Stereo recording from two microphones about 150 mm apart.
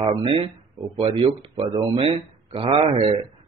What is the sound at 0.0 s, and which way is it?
A man's voice, 35° right (ahead or behind).